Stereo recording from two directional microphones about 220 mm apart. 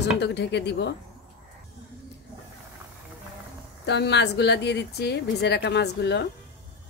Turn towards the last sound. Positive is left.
turn(degrees=50)  # may be behind; listen again after turning